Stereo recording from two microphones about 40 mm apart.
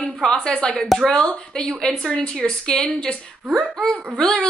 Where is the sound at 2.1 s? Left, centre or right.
Left.